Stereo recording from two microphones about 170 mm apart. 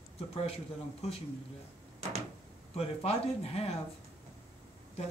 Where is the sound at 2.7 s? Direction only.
35° left (ahead or behind).